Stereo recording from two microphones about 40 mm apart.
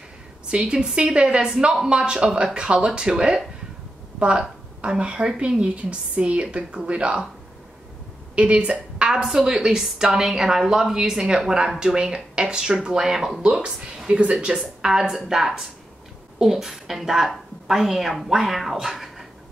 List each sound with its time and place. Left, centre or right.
0.6 s speech: right
4.2 s a woman's voice: right
8.4 s speech: right
8.7 s a sound: right
9.1 s a woman's voice: centre
13.4 s speech: right
14.2 s a woman's voice: right
14.8 s a woman's voice: centre